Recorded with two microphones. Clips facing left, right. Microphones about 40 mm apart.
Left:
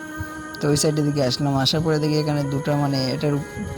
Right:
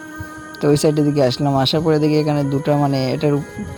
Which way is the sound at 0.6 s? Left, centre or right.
Right.